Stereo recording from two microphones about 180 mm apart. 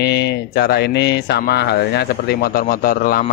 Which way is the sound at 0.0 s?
65° left (ahead or behind).